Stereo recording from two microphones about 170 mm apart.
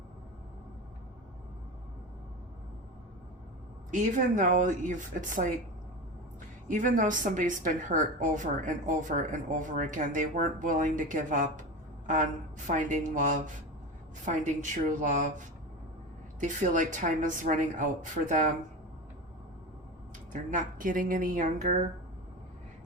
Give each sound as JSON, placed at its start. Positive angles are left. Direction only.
{"t": 3.9, "sound": "a woman's voice", "side_deg": -50}
{"t": 6.7, "sound": "a woman's voice", "side_deg": -50}
{"t": 12.6, "sound": "a woman's voice", "side_deg": -50}
{"t": 20.3, "sound": "a woman's voice", "side_deg": -50}